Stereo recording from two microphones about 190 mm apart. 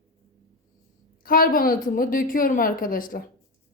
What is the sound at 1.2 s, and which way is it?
Speech, 50° left (ahead or behind).